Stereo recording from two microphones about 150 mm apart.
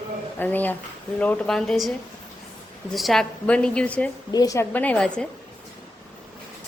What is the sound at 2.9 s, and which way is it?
A woman's voice, centre (ahead or behind).